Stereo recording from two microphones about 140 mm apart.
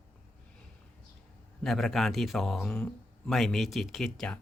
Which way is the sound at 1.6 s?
Centre (ahead or behind).